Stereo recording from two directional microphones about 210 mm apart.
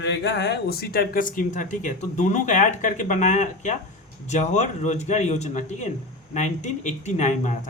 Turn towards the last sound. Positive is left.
turn(degrees=35)  # may be behind; listen again after turning